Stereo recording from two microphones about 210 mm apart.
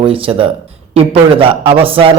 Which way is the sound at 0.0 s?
25° right (ahead or behind).